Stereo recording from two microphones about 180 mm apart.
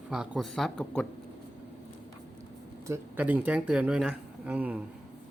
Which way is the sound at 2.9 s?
10° right (ahead or behind).